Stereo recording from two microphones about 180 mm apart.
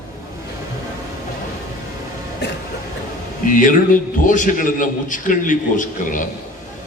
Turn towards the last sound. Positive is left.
turn(degrees=45)  # may be behind; listen again after turning